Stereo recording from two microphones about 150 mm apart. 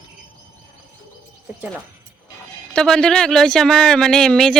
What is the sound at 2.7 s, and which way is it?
Speech, 5° left (ahead or behind).